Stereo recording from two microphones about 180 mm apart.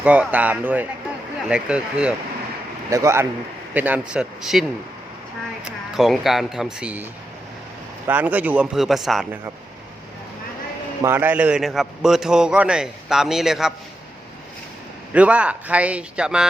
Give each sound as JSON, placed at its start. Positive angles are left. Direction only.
{"t": 0.0, "sound": "a man's voice", "side_deg": -5}
{"t": 2.9, "sound": "a man's voice", "side_deg": -15}
{"t": 5.6, "sound": "a man's voice", "side_deg": 0}
{"t": 11.0, "sound": "a man's voice", "side_deg": -10}
{"t": 15.1, "sound": "speech", "side_deg": -5}